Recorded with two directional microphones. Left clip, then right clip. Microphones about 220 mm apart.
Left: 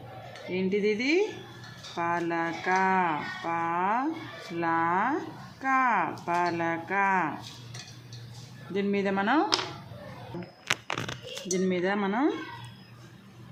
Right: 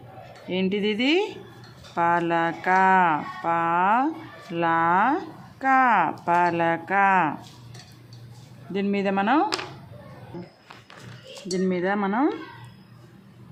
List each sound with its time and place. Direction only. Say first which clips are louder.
0.5 s speech: right 2 dB; 30° right (ahead or behind)
8.7 s speech: right 3 dB; 25° right (ahead or behind)
11.4 s speech: right 3 dB; 15° right (ahead or behind)